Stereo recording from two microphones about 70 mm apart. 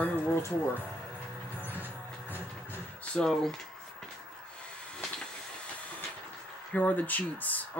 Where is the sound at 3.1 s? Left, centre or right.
Centre.